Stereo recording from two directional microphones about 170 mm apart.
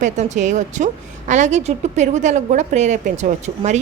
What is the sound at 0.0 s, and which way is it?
A woman's voice, 45° right (ahead or behind).